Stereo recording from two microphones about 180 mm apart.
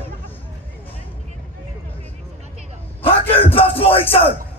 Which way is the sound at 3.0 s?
30° left (ahead or behind).